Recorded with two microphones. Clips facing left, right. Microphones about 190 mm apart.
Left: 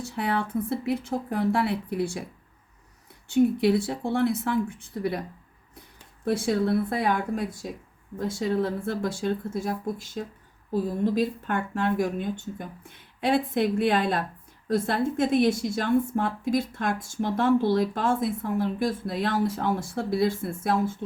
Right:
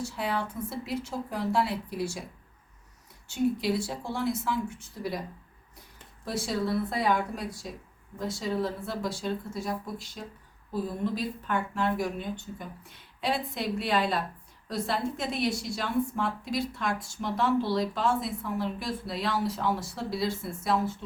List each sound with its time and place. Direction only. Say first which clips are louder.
0.0 s speech: left 3 dB; 60° left (ahead or behind)
3.2 s speech: left 6 dB; 60° left (ahead or behind)
6.2 s a woman's voice: left 6 dB; 55° left (ahead or behind)